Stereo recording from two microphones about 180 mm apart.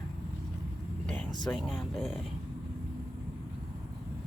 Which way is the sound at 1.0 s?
5° left (ahead or behind).